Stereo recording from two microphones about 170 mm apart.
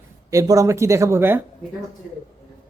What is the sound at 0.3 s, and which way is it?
Speech, 20° right (ahead or behind).